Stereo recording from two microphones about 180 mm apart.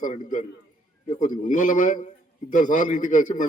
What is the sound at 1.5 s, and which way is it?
A man's voice, 45° left (ahead or behind).